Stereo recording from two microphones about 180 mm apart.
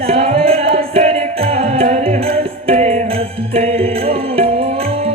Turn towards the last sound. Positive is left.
turn(degrees=-35)  # may be behind; listen again after turning